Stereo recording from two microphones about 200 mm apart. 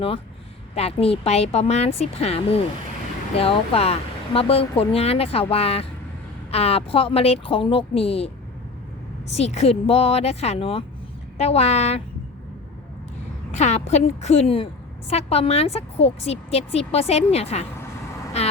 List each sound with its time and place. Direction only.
0.8 s speech: 30° left (ahead or behind)
9.3 s a woman's voice: 35° left (ahead or behind)
13.5 s a woman's voice: 35° left (ahead or behind)